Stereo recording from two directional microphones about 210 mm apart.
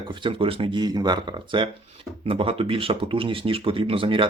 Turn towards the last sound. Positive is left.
turn(degrees=-25)  # may be behind; listen again after turning